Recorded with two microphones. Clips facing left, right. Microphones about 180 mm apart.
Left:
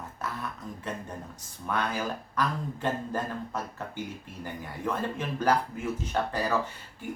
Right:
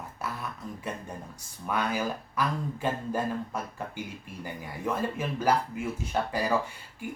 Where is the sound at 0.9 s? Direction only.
10° right (ahead or behind).